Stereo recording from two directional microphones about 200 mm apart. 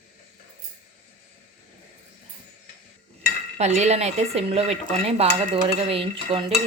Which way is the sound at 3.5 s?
35° right (ahead or behind).